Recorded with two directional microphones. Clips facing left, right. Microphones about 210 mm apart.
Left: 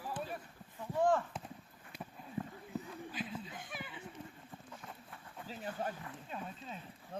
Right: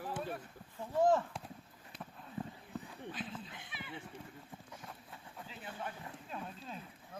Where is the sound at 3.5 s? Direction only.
45° left (ahead or behind).